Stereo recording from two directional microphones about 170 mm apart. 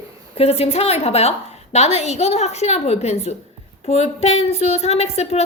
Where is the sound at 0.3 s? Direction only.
35° left (ahead or behind).